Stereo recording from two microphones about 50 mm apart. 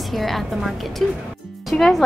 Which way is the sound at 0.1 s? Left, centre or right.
Centre.